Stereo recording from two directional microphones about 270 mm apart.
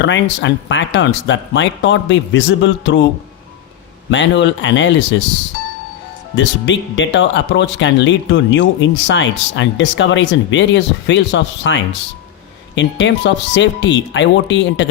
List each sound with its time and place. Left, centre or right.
0.0 s speech: left
4.1 s speech: left
6.3 s speech: left